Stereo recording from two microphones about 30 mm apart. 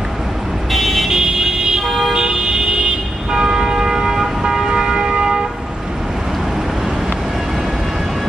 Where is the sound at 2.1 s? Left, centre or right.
Right.